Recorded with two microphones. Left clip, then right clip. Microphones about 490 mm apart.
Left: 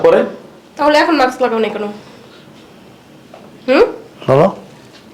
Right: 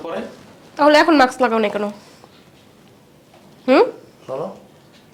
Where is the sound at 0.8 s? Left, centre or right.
Right.